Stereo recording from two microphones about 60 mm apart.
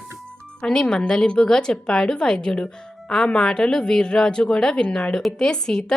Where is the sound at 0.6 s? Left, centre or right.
Centre.